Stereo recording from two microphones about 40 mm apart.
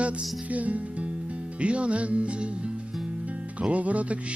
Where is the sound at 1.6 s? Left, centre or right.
Right.